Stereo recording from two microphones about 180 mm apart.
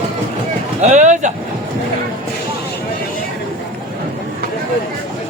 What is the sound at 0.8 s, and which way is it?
Speech, 40° right (ahead or behind).